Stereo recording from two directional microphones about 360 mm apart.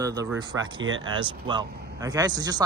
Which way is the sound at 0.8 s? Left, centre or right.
Right.